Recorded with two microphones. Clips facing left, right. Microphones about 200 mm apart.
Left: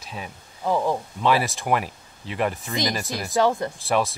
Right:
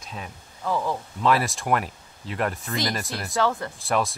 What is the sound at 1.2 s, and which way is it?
Speech, centre (ahead or behind).